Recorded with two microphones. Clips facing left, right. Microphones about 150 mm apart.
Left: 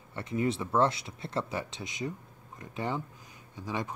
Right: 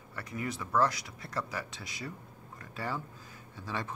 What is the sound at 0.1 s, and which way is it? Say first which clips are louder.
Speech: left 7 dB; 25° left (ahead or behind).